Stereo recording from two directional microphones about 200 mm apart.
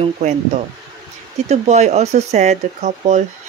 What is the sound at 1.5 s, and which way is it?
Speech, 35° right (ahead or behind).